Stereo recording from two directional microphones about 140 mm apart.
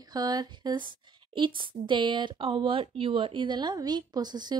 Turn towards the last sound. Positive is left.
turn(degrees=-30)  # may be behind; listen again after turning